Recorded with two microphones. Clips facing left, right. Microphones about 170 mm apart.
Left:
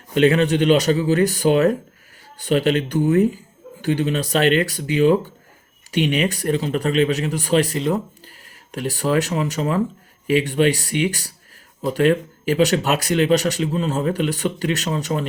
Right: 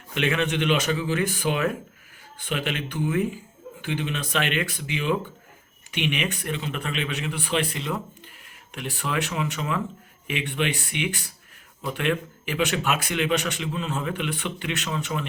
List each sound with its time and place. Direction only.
0.1 s speech: 35° left (ahead or behind)